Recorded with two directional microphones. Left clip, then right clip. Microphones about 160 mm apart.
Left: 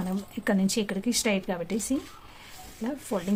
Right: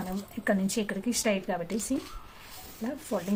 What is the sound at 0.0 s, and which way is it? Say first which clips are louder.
Speech: left 1 dB; 60° left (ahead or behind).